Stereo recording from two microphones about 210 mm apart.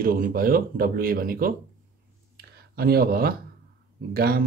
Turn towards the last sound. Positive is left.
turn(degrees=-45)  # may be behind; listen again after turning